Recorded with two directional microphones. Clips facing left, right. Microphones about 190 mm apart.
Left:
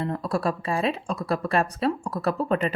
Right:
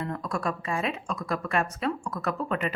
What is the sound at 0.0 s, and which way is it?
A woman's voice, 30° left (ahead or behind).